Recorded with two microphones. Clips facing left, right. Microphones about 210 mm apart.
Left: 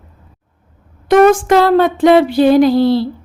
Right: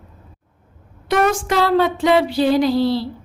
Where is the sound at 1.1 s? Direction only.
50° left (ahead or behind).